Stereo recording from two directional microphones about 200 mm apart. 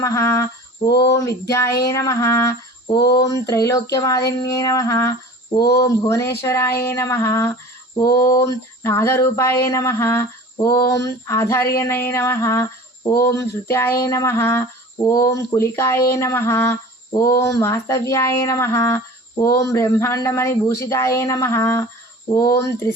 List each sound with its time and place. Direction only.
0.0 s speech: 15° left (ahead or behind)